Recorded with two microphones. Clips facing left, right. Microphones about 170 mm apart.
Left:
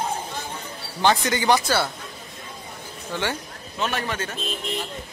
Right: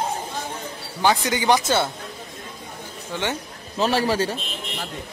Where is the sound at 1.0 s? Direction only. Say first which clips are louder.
Even; 10° right (ahead or behind).